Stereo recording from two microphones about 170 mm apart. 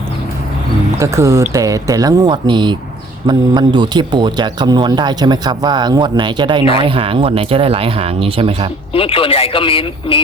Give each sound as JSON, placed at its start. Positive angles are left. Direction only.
{"t": 0.9, "sound": "speech", "side_deg": -15}
{"t": 8.9, "sound": "a man's voice", "side_deg": 35}